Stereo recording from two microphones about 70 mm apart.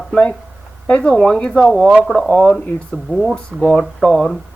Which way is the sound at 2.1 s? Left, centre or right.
Right.